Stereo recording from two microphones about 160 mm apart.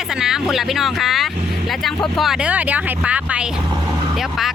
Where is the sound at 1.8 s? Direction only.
Centre (ahead or behind).